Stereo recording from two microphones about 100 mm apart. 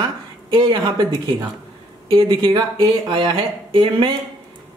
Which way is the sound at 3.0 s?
50° right (ahead or behind).